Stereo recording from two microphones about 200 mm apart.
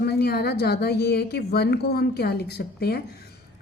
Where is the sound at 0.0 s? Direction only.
50° left (ahead or behind).